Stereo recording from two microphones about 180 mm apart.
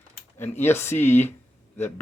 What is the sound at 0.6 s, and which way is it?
Speech, 15° left (ahead or behind).